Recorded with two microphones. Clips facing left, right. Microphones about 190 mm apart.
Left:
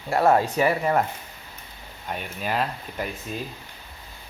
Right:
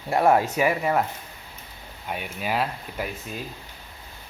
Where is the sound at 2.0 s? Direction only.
10° right (ahead or behind).